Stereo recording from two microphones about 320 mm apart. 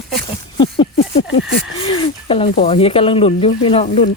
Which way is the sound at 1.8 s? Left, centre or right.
Centre.